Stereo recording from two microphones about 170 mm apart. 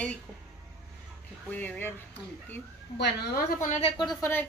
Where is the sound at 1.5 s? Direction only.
10° left (ahead or behind).